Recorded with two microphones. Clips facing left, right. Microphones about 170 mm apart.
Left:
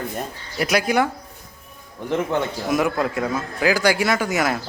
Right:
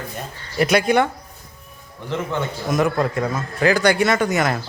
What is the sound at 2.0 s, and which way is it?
A man's voice, 15° left (ahead or behind).